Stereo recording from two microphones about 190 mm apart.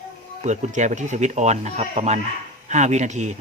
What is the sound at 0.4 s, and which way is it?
A child's voice, 40° right (ahead or behind).